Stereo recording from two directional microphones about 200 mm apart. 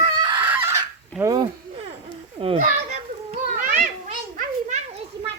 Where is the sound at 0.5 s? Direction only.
10° right (ahead or behind).